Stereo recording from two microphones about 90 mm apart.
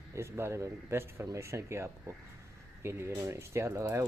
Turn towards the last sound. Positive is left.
turn(degrees=-30)  # may be behind; listen again after turning